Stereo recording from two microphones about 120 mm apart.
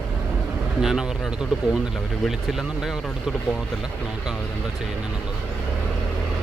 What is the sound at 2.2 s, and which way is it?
Speech, 5° right (ahead or behind).